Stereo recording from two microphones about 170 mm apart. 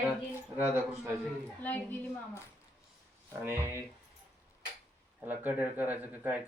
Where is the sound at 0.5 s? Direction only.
10° right (ahead or behind).